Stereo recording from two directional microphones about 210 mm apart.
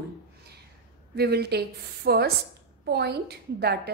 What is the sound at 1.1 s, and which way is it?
A woman's voice, 50° right (ahead or behind).